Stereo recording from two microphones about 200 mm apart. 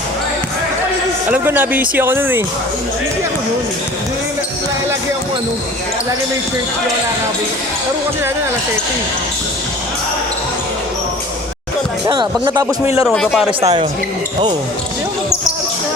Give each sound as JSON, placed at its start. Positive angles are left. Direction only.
{"t": 1.3, "sound": "speech", "side_deg": -10}
{"t": 12.0, "sound": "speech", "side_deg": -20}
{"t": 13.0, "sound": "speech", "side_deg": 0}
{"t": 13.6, "sound": "speech", "side_deg": -25}